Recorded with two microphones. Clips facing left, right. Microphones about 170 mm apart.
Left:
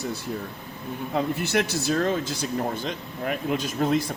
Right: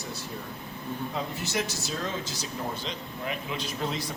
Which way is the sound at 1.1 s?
60° left (ahead or behind).